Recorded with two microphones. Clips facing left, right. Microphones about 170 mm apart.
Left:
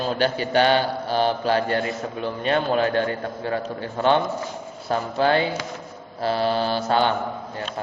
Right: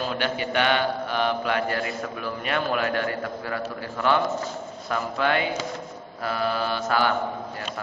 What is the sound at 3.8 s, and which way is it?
Speech, 25° left (ahead or behind).